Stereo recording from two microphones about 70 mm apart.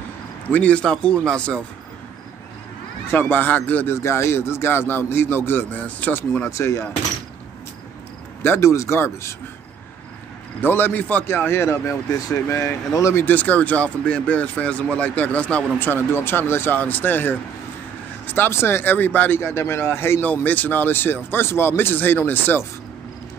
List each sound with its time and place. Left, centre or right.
0.5 s speech: centre
3.1 s speech: left
3.9 s speech: left
6.5 s speech: left
8.4 s speech: left
10.6 s speech: left
13.2 s speech: left
15.8 s speech: left
19.4 s speech: left
20.4 s speech: left